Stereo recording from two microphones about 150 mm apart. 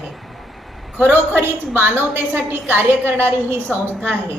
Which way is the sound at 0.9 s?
10° right (ahead or behind).